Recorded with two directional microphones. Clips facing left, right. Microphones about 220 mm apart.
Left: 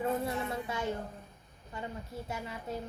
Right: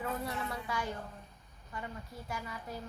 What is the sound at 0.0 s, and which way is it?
A woman's voice, 25° left (ahead or behind).